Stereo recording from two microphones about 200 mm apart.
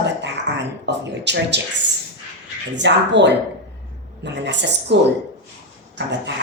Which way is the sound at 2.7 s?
60° right (ahead or behind).